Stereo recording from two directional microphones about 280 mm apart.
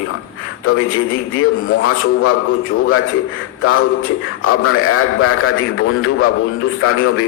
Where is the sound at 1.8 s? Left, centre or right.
Left.